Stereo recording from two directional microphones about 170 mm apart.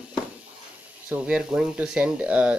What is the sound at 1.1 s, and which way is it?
Speech, 5° right (ahead or behind).